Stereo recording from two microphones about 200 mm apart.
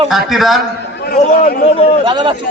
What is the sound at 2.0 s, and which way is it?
Speech, 25° right (ahead or behind).